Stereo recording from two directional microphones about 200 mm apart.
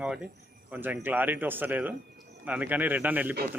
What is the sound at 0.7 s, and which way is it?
Speech, 10° right (ahead or behind).